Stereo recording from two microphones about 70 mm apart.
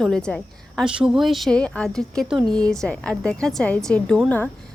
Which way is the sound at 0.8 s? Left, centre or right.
Centre.